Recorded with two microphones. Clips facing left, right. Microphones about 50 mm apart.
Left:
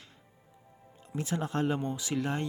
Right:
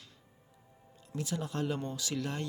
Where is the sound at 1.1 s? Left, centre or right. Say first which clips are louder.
Left 4 dB; left.